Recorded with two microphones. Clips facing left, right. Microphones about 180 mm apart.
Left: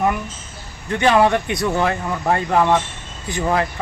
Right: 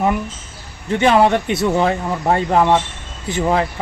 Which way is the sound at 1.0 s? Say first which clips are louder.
Right 2 dB; 25° right (ahead or behind).